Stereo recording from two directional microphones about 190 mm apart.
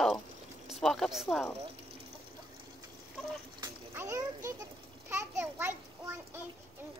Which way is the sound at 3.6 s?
15° right (ahead or behind).